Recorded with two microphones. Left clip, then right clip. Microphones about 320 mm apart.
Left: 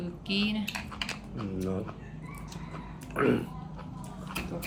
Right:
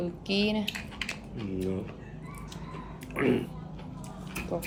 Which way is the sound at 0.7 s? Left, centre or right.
Centre.